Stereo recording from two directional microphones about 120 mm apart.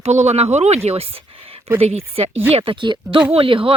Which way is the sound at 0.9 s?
55° right (ahead or behind).